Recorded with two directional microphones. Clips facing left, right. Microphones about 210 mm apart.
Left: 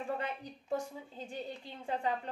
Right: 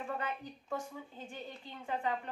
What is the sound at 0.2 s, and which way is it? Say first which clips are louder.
A woman's voice: left 1 dB; 35° left (ahead or behind).